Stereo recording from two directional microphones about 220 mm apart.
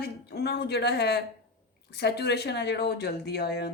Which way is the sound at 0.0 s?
45° left (ahead or behind).